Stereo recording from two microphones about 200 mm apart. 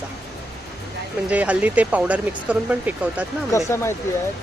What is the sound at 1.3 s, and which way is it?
Speech, 5° right (ahead or behind).